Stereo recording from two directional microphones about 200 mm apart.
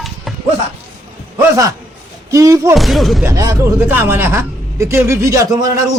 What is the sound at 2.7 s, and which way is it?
Speech, centre (ahead or behind).